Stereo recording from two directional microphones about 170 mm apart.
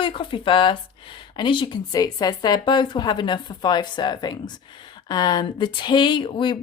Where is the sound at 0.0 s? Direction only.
30° left (ahead or behind).